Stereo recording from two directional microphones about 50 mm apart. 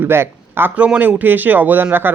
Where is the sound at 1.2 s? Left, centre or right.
Right.